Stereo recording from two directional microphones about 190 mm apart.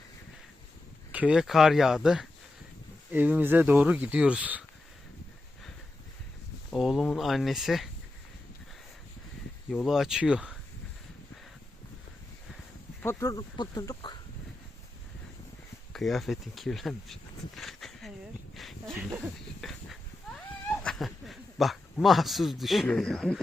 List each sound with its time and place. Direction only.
1.1 s speech: 5° right (ahead or behind)
6.7 s speech: centre (ahead or behind)
9.8 s speech: centre (ahead or behind)
13.0 s speech: 15° left (ahead or behind)
15.9 s speech: centre (ahead or behind)
18.5 s a sound: centre (ahead or behind)
20.7 s speech: centre (ahead or behind)